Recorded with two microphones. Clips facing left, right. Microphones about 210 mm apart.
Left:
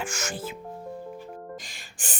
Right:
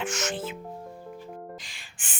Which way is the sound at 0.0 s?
10° left (ahead or behind).